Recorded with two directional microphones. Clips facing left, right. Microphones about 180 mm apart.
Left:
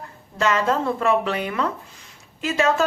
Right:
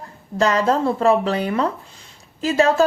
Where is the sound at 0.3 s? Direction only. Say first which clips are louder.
Right 3 dB; 35° right (ahead or behind).